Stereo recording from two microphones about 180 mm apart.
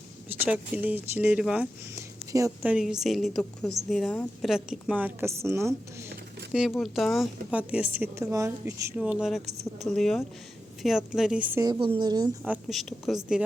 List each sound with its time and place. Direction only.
0.3 s a woman's voice: 10° right (ahead or behind)
2.0 s a woman's voice: 15° right (ahead or behind)
6.5 s a woman's voice: centre (ahead or behind)
9.0 s a woman's voice: 5° right (ahead or behind)
11.6 s a woman's voice: 25° right (ahead or behind)
12.5 s a woman's voice: centre (ahead or behind)